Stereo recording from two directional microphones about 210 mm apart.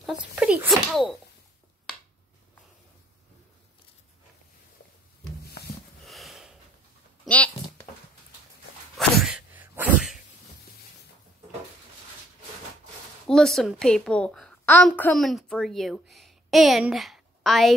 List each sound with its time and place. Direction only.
0.0 s speech: 5° right (ahead or behind)
5.4 s a sound: 50° left (ahead or behind)
6.0 s sniff: centre (ahead or behind)
7.2 s a sound: 5° left (ahead or behind)
8.9 s sneeze: 5° right (ahead or behind)
13.3 s a woman's voice: centre (ahead or behind)